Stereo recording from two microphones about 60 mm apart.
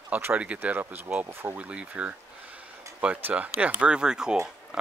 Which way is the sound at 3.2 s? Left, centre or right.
Right.